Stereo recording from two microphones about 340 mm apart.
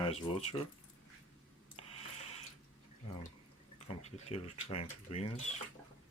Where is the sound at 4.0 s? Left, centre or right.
Centre.